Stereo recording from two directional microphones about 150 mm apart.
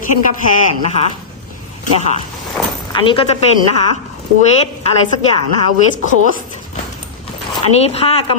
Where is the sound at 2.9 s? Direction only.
35° left (ahead or behind).